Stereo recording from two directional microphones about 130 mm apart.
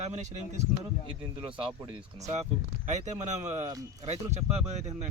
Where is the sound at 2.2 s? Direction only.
60° right (ahead or behind).